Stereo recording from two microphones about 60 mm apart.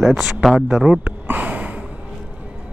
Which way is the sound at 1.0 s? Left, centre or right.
Right.